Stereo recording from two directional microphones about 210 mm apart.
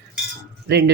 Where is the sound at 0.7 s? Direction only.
50° right (ahead or behind).